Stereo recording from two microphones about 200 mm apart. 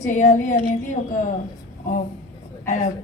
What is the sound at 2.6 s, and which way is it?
Speech, 35° left (ahead or behind).